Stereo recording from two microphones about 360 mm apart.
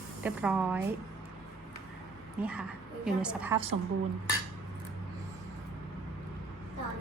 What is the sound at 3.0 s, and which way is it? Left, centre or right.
Speech, centre.